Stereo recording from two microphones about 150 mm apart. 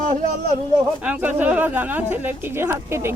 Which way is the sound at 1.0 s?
10° right (ahead or behind).